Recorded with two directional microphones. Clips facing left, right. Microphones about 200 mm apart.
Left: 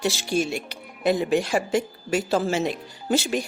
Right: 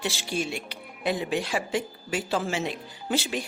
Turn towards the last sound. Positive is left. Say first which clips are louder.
# left 5 dB
turn(degrees=45)  # may be behind; listen again after turning